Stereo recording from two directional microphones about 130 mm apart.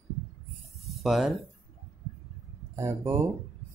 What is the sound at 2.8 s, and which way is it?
Speech, 20° right (ahead or behind).